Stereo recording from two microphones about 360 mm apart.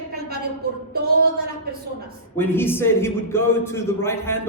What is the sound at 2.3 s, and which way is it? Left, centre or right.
A man's voice, centre.